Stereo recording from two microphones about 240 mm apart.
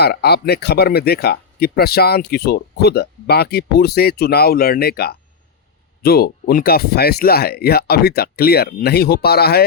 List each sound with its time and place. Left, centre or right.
0.0 s speech: left